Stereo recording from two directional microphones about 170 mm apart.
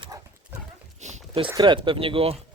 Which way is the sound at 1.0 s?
40° right (ahead or behind).